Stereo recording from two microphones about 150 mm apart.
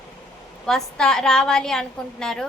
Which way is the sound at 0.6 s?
5° left (ahead or behind).